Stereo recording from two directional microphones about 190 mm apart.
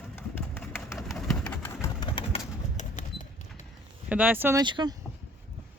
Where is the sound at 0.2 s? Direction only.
10° left (ahead or behind).